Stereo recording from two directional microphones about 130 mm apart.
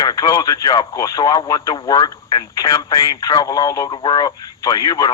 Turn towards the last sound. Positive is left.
turn(degrees=30)  # may be behind; listen again after turning